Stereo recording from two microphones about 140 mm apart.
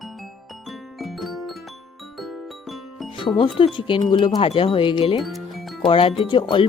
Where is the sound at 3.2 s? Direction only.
35° left (ahead or behind).